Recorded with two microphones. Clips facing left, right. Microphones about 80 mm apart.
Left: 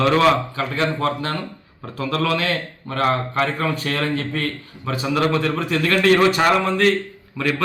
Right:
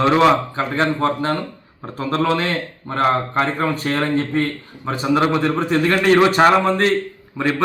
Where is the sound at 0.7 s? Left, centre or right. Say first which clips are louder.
Right 3 dB; right.